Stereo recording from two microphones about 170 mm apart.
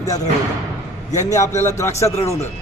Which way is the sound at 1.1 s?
45° left (ahead or behind).